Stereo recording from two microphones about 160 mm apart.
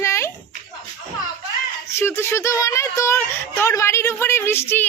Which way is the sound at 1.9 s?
15° left (ahead or behind).